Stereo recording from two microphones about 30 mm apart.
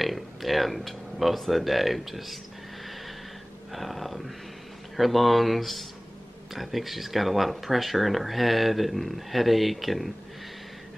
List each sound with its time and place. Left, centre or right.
0.0 s speech: centre
3.7 s speech: centre